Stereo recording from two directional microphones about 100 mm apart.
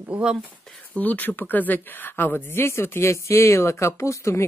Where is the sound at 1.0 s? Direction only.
15° left (ahead or behind).